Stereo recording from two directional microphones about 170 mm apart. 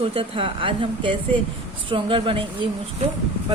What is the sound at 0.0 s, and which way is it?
Speech, 30° right (ahead or behind).